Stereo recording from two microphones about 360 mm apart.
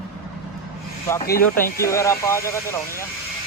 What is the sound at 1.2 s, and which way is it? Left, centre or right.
Speech, left.